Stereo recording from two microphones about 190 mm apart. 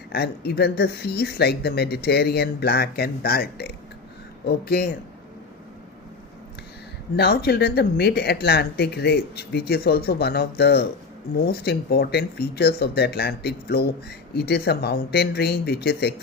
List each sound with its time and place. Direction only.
0.1 s speech: 55° left (ahead or behind)
7.2 s speech: 60° left (ahead or behind)